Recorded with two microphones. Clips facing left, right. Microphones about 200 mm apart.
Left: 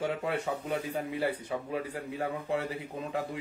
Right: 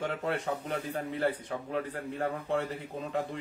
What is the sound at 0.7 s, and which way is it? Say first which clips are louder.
Speech: left 1 dB; 10° left (ahead or behind).